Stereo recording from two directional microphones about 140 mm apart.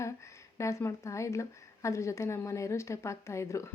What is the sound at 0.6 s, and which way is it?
Speech, 20° left (ahead or behind).